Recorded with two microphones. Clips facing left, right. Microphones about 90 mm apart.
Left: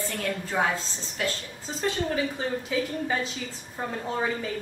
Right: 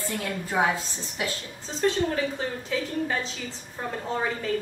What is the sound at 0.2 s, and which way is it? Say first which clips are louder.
A woman's voice: right 1 dB; 15° right (ahead or behind).